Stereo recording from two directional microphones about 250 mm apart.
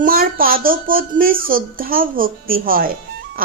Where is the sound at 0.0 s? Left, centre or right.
Right.